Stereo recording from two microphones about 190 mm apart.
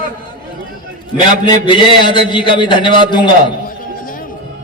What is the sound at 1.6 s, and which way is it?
A man's voice, 25° left (ahead or behind).